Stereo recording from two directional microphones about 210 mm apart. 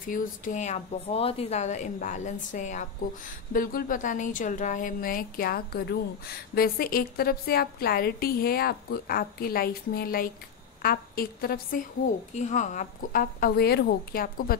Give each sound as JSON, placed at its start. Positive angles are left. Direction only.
{"t": 0.0, "sound": "a woman's voice", "side_deg": 40}